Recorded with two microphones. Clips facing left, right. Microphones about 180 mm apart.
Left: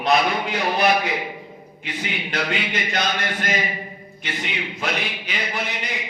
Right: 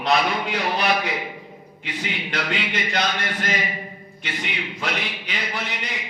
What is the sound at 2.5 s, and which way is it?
A man's voice, 45° left (ahead or behind).